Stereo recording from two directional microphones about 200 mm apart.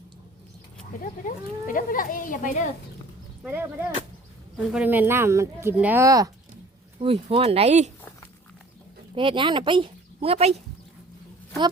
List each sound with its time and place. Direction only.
1.0 s speech: 40° left (ahead or behind)
3.4 s speech: 10° right (ahead or behind)
7.0 s speech: 30° right (ahead or behind)
9.1 s speech: 25° right (ahead or behind)